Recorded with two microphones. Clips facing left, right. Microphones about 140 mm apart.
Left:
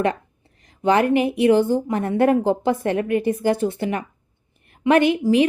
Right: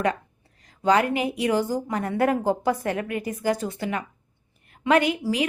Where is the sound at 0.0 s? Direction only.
25° left (ahead or behind).